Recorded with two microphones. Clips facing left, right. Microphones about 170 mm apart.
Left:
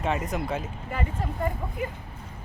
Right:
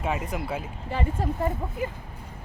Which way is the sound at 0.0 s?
5° right (ahead or behind).